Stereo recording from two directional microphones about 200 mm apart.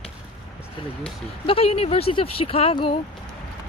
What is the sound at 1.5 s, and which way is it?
Speech, 30° left (ahead or behind).